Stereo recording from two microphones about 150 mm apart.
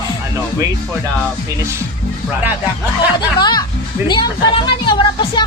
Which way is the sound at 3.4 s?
30° left (ahead or behind).